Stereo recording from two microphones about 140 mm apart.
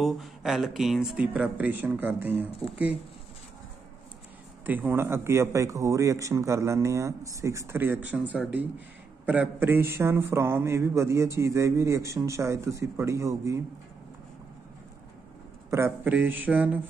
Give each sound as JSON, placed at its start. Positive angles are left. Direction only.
{"t": 0.0, "sound": "speech", "side_deg": 0}
{"t": 4.6, "sound": "a man's voice", "side_deg": -15}
{"t": 15.7, "sound": "speech", "side_deg": -15}